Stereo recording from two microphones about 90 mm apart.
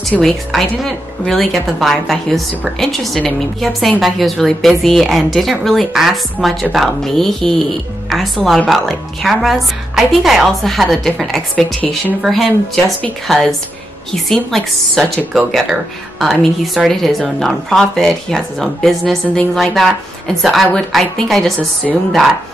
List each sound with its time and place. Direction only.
0.2 s a woman's voice: centre (ahead or behind)